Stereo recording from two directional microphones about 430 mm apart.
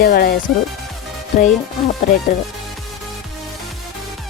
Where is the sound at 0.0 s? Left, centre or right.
Left.